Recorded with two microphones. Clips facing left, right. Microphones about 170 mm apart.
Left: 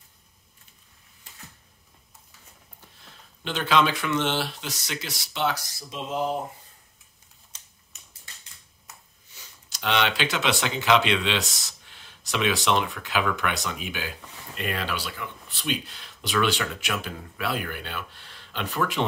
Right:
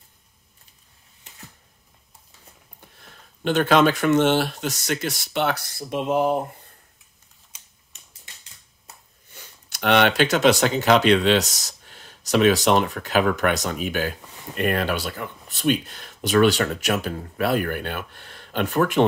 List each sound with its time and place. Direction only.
3.0 s speech: 50° right (ahead or behind)
9.3 s speech: 55° right (ahead or behind)